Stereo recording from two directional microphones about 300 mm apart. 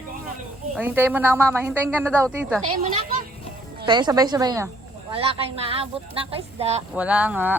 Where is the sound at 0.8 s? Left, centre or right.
Centre.